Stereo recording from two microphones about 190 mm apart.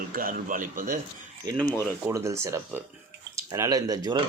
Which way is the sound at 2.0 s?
15° right (ahead or behind).